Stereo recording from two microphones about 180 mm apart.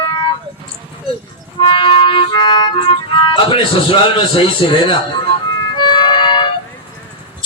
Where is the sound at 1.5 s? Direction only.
30° left (ahead or behind).